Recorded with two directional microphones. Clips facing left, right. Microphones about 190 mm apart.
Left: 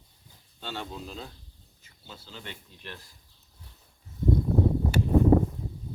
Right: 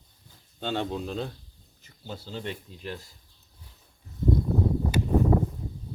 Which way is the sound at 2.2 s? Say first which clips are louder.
Right 9 dB; 35° right (ahead or behind).